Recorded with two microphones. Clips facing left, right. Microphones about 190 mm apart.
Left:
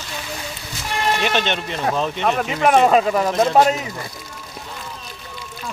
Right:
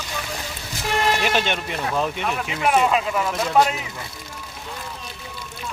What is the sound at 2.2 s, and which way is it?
Speech, 45° left (ahead or behind).